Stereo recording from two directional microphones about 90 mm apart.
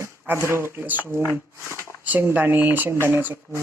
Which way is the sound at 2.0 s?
20° right (ahead or behind).